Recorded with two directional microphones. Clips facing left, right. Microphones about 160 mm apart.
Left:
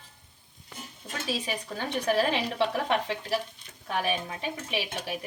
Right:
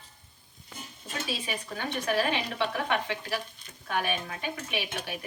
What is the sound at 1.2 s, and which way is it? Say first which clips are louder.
A woman's voice: left 4 dB; 40° left (ahead or behind).